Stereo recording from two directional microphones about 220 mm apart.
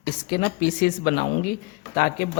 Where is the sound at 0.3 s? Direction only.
40° left (ahead or behind).